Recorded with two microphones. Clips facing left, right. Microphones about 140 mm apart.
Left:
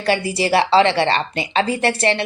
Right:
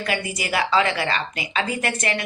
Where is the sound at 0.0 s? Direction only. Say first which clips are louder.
Left 7 dB; 30° left (ahead or behind).